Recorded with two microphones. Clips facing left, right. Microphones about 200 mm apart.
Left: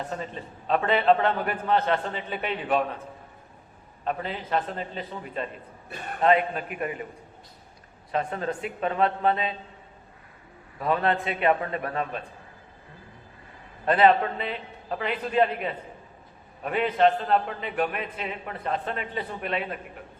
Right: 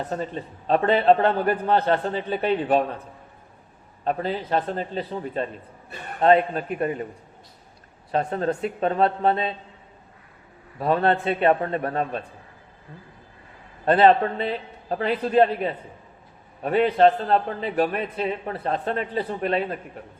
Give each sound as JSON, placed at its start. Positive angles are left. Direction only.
{"t": 0.7, "sound": "a man's voice", "side_deg": -35}
{"t": 4.0, "sound": "a man's voice", "side_deg": -35}
{"t": 8.1, "sound": "a man's voice", "side_deg": -35}
{"t": 10.8, "sound": "a man's voice", "side_deg": -30}
{"t": 13.8, "sound": "a man's voice", "side_deg": -35}